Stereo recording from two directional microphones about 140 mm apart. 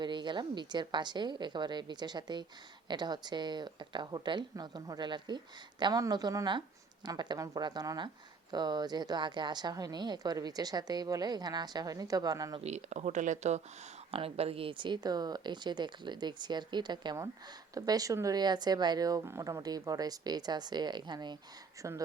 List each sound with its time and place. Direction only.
0.0 s speech: 35° right (ahead or behind)
12.5 s speech: 55° right (ahead or behind)
14.1 s speech: 45° right (ahead or behind); by 22.0 s 25° right (ahead or behind)